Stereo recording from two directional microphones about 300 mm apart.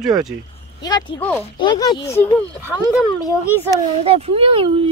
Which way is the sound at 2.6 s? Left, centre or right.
Centre.